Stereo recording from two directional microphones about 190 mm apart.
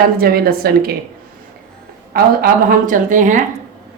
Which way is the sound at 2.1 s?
50° right (ahead or behind).